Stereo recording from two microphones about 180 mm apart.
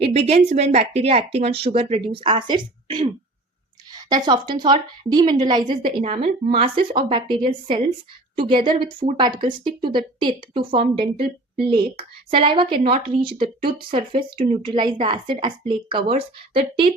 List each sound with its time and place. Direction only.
0.3 s a woman's voice: 35° right (ahead or behind)